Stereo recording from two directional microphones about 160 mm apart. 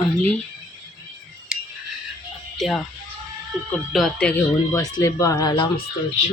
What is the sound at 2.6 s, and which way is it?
Speech, centre (ahead or behind).